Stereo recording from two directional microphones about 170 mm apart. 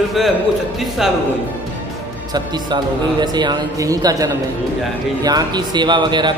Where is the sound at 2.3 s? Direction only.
25° right (ahead or behind).